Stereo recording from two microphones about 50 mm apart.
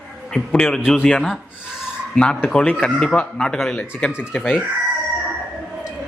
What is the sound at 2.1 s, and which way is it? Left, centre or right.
Speech, left.